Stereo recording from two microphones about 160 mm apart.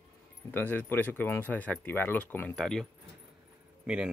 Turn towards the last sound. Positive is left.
turn(degrees=-5)  # may be behind; listen again after turning